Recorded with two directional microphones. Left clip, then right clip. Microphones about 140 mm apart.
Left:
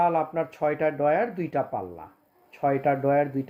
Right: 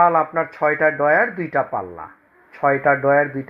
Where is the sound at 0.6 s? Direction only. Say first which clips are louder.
Right 8 dB; 30° left (ahead or behind).